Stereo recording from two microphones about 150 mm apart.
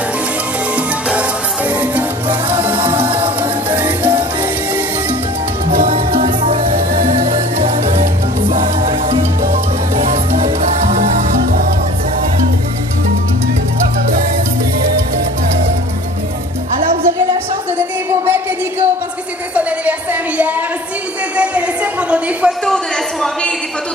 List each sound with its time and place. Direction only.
1.7 s music: 10° right (ahead or behind)
2.7 s music: 35° right (ahead or behind)
3.7 s salsa music: 15° right (ahead or behind)
5.7 s music: 70° right (ahead or behind)
6.2 s music: 45° right (ahead or behind)
9.5 s music: 45° right (ahead or behind)
16.7 s music: 55° right (ahead or behind)
17.7 s music: 15° right (ahead or behind)
19.5 s a sound: 10° right (ahead or behind)
22.1 s a man's voice: 5° right (ahead or behind)